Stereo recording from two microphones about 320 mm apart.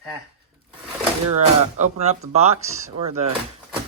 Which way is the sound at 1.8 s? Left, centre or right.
Right.